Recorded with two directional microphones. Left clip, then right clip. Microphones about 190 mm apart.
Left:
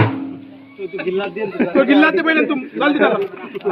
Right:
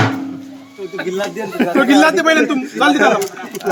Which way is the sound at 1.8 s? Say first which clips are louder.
Right 1 dB; 80° right.